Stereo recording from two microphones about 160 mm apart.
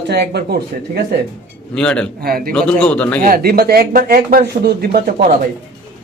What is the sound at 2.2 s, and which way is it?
Speech, 65° right (ahead or behind).